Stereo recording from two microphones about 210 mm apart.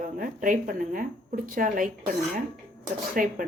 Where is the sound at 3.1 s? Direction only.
40° right (ahead or behind).